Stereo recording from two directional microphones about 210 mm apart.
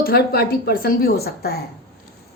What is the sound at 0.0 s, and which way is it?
A woman's voice, 45° left (ahead or behind).